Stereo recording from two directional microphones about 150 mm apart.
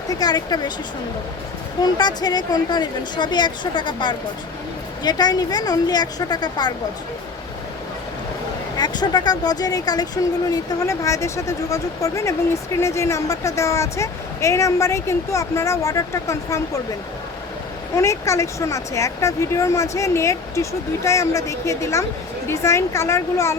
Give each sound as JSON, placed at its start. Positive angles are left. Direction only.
{"t": 0.1, "sound": "speech", "side_deg": 25}
{"t": 1.8, "sound": "speech", "side_deg": 30}
{"t": 8.8, "sound": "speech", "side_deg": 25}
{"t": 17.9, "sound": "speech", "side_deg": 20}